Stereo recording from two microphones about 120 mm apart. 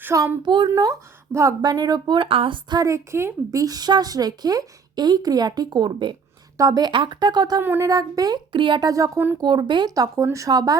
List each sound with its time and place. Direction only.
0.0 s a woman's voice: 25° right (ahead or behind)
0.4 s speech: 40° right (ahead or behind)
1.3 s speech: 25° right (ahead or behind)
7.6 s speech: 15° right (ahead or behind)
7.9 s speech: 30° right (ahead or behind)
8.5 s speech: 40° right (ahead or behind)